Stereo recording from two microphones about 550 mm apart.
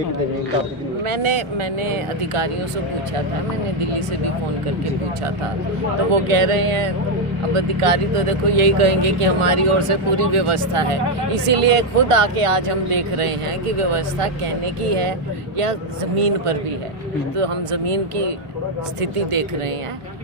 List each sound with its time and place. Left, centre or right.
1.0 s speech: right
6.2 s speech: right
14.8 s speech: right
16.1 s speech: right